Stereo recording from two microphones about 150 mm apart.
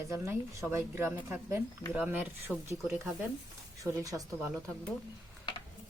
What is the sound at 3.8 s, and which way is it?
Speech, 20° right (ahead or behind).